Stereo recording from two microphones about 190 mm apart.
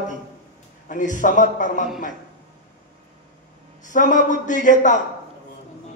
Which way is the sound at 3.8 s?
45° left (ahead or behind).